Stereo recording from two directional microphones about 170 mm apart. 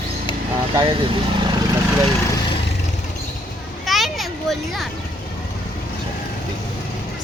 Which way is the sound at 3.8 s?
Centre (ahead or behind).